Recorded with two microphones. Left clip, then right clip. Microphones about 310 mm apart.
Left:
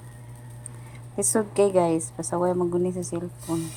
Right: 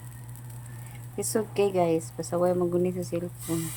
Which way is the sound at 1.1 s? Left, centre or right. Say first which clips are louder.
Left 4 dB; left.